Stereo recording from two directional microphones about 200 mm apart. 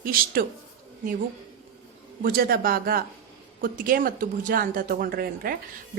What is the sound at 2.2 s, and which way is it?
A woman's voice, 45° right (ahead or behind).